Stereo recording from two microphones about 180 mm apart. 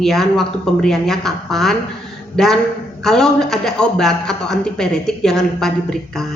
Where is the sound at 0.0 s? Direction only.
Centre (ahead or behind).